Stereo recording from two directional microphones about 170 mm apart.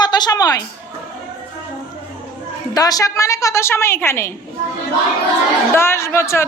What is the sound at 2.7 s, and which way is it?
A woman's voice, 20° left (ahead or behind).